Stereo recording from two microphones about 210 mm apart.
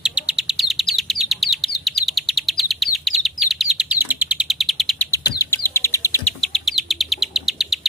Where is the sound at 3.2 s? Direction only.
Centre (ahead or behind).